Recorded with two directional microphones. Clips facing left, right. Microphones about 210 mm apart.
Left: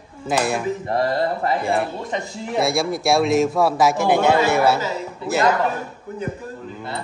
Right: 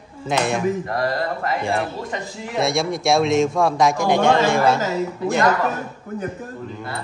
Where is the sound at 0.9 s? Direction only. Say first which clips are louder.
Left 2 dB; 30° left (ahead or behind).